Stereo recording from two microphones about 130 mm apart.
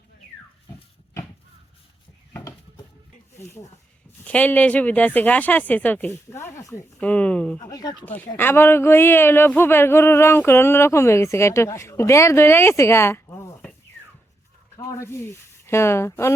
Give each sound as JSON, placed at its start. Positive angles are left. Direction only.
{"t": 4.2, "sound": "speech", "side_deg": 10}
{"t": 7.0, "sound": "speech", "side_deg": 10}
{"t": 7.6, "sound": "speech", "side_deg": 30}
{"t": 8.0, "sound": "speech", "side_deg": 10}
{"t": 14.8, "sound": "speech", "side_deg": 20}